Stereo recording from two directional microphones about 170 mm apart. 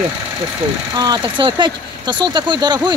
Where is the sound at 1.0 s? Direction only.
25° right (ahead or behind).